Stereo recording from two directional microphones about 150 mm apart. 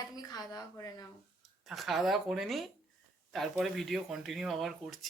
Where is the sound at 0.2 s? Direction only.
25° left (ahead or behind).